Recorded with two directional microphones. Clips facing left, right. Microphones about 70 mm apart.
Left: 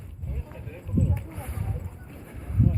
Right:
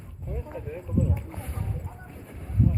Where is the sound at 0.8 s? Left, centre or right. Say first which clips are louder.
Left 1 dB; centre.